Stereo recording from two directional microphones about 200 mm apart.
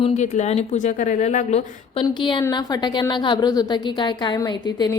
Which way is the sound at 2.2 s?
20° left (ahead or behind).